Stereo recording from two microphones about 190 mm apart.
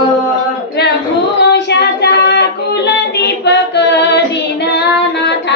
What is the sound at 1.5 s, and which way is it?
Child singing, 60° left (ahead or behind).